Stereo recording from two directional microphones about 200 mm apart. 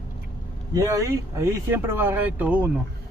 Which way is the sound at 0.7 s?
15° right (ahead or behind).